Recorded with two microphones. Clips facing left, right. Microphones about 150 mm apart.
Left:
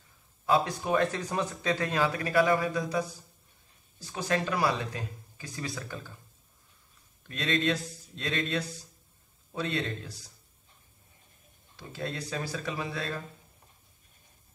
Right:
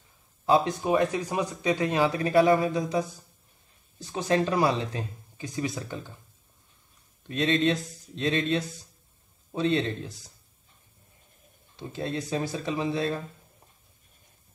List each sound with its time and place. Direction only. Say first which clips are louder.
0.5 s speech: right 4 dB; 20° right (ahead or behind)
4.0 s speech: right 5 dB; 25° right (ahead or behind)
7.2 s speech: right 5 dB; 25° right (ahead or behind)
11.7 s speech: right 5 dB; 25° right (ahead or behind)